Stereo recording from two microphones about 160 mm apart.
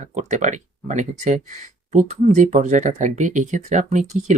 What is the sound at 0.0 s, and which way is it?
Speech, 50° right (ahead or behind).